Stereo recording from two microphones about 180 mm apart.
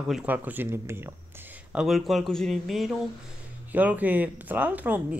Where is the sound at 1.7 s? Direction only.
Centre (ahead or behind).